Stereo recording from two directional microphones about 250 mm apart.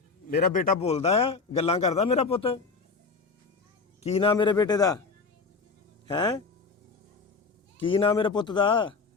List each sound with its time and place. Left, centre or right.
0.3 s a man's voice: left
4.0 s a man's voice: left
6.1 s a man's voice: centre
7.8 s a man's voice: left